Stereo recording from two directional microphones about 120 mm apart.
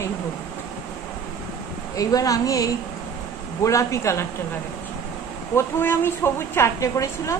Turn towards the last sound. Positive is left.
turn(degrees=25)  # may be behind; listen again after turning